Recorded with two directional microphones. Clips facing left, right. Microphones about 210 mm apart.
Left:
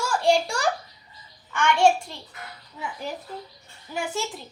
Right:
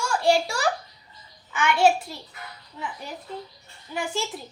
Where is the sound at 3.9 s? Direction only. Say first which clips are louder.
Even; 5° left (ahead or behind).